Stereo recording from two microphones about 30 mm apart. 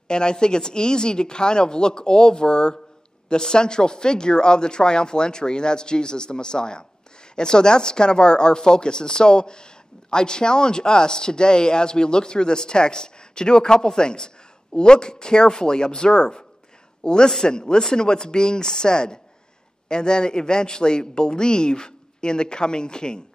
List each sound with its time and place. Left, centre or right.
0.1 s a woman's voice: left